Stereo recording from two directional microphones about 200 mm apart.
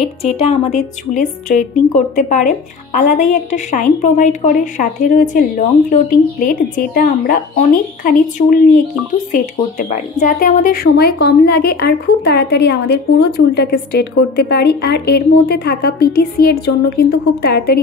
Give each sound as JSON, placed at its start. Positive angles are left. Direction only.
{"t": 0.2, "sound": "a woman's voice", "side_deg": 30}
{"t": 6.4, "sound": "speech", "side_deg": 40}